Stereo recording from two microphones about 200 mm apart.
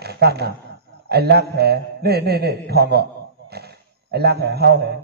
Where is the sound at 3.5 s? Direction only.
55° right (ahead or behind).